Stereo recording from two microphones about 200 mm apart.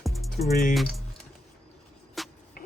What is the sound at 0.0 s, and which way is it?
Music, centre (ahead or behind).